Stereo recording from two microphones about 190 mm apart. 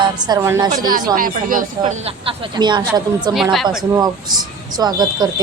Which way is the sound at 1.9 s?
30° right (ahead or behind).